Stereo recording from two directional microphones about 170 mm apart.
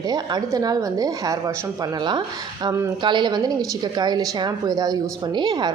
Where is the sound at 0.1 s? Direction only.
25° right (ahead or behind).